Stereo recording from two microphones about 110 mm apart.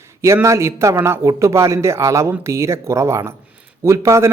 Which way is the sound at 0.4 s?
25° right (ahead or behind).